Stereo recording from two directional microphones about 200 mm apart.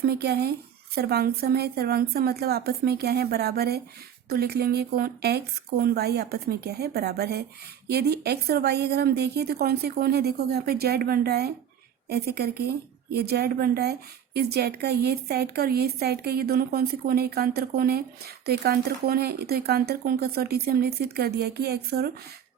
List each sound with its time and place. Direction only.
0.0 s a woman's voice: 50° right (ahead or behind)